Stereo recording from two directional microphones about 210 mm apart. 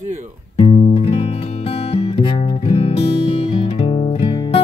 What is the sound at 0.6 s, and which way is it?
Music, 30° left (ahead or behind).